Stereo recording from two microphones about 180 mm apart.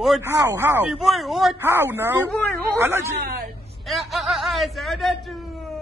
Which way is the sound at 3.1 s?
60° right (ahead or behind).